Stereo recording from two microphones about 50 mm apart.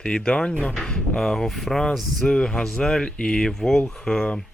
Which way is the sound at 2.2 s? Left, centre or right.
Centre.